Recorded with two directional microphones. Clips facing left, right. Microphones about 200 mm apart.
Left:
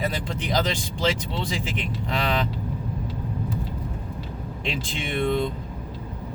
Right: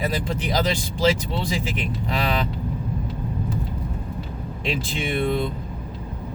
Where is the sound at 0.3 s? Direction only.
5° right (ahead or behind).